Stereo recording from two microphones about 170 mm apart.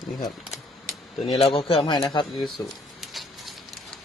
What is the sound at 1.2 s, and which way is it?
Speech, 35° left (ahead or behind).